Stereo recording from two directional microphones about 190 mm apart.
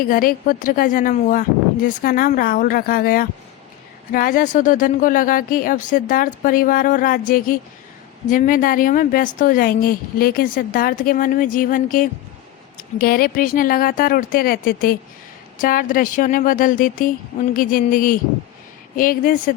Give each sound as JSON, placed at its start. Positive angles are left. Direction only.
{"t": 0.0, "sound": "a woman's voice", "side_deg": 50}